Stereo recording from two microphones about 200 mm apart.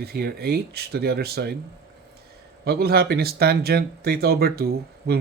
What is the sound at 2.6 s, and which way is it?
Speech, 50° right (ahead or behind).